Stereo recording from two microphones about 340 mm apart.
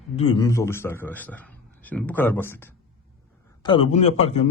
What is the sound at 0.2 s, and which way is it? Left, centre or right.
A man's voice, centre.